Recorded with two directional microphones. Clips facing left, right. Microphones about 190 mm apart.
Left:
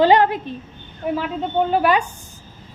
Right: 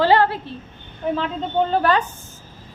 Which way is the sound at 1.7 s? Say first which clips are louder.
Left 2 dB; 10° left (ahead or behind).